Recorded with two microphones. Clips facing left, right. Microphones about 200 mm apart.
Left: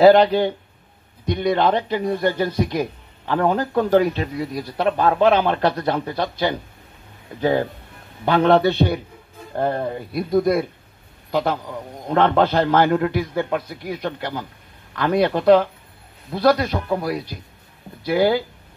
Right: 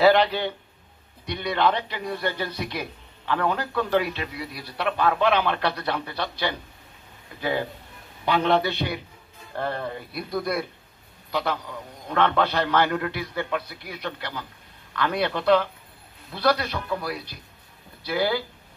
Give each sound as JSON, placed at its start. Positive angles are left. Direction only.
{"t": 0.0, "sound": "speech", "side_deg": 45}